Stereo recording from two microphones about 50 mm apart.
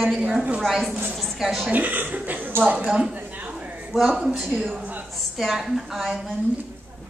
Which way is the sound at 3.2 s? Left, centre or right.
Right.